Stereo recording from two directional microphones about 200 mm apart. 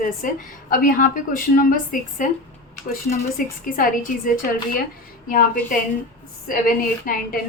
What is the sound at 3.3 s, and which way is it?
Speech, 45° left (ahead or behind).